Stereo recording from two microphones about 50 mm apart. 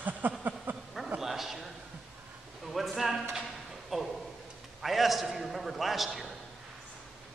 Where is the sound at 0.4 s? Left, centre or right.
Right.